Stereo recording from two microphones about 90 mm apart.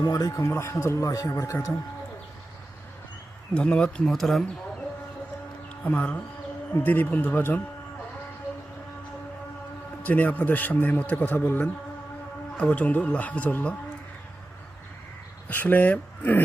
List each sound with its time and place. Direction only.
0.0 s speech: 45° left (ahead or behind)
3.5 s a man's voice: 10° left (ahead or behind)
5.8 s a man's voice: 20° left (ahead or behind)
10.0 s a man's voice: 20° left (ahead or behind)
15.4 s speech: 20° left (ahead or behind)